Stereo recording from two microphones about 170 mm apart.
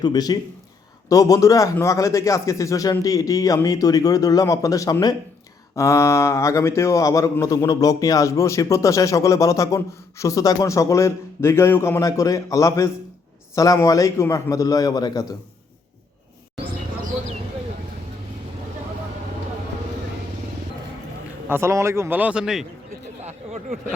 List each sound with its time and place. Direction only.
0.0 s speech: 25° left (ahead or behind)
21.5 s a man's voice: 15° right (ahead or behind)